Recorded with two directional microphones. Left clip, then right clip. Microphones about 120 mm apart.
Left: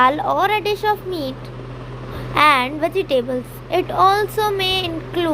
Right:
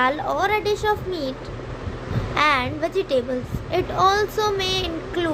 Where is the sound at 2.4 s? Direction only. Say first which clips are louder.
Left 5 dB; 30° left (ahead or behind).